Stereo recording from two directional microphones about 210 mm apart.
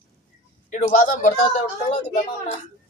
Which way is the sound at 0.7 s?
40° left (ahead or behind).